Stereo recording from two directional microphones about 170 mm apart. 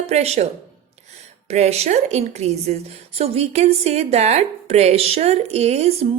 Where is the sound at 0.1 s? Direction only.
40° right (ahead or behind).